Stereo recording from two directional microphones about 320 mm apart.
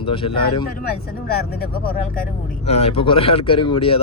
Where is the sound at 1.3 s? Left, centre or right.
Left.